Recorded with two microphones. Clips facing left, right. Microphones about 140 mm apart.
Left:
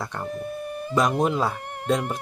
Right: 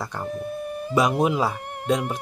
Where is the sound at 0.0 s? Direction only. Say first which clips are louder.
Right 1 dB; centre (ahead or behind).